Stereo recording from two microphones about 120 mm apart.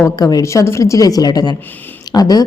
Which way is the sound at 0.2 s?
30° left (ahead or behind).